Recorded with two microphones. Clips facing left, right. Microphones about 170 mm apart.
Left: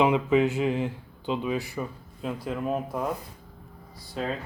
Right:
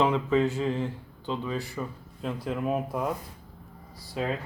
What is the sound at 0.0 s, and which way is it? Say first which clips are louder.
Speech: left 2 dB; 15° left (ahead or behind).